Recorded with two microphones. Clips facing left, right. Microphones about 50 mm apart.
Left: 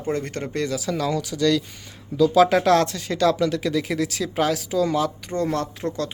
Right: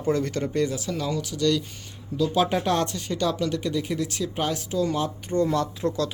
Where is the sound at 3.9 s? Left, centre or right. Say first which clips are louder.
Left 4 dB; left.